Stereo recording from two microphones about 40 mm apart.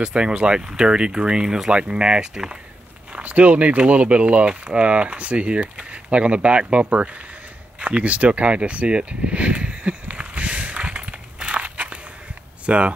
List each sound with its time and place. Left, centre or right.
0.0 s speech: right
3.2 s speech: right
10.1 s a sound: right
11.3 s crushing: right
12.6 s speech: right